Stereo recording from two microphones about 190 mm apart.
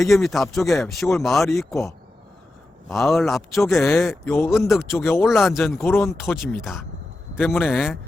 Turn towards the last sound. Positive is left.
turn(degrees=10)  # may be behind; listen again after turning